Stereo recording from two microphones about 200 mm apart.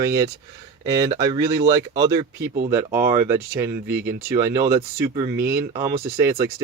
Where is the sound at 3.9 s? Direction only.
50° right (ahead or behind).